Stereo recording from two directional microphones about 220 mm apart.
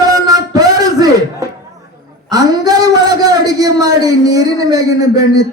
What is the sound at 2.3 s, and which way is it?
A man's voice, 15° right (ahead or behind).